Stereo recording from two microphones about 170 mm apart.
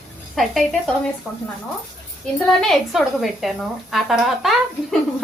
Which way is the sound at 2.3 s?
Centre (ahead or behind).